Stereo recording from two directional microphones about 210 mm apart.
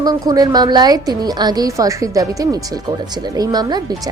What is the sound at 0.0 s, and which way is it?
A woman's voice, 20° right (ahead or behind).